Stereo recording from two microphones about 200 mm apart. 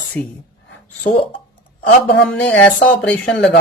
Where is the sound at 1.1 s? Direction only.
45° left (ahead or behind).